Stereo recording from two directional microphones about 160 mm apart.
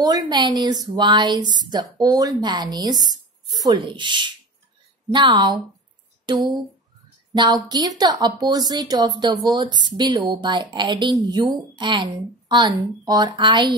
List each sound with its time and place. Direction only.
0.0 s speech: 25° right (ahead or behind)